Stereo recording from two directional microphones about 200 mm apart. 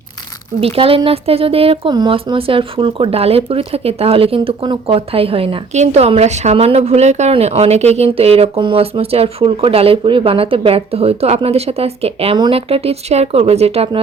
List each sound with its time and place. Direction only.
0.6 s speech: 30° right (ahead or behind)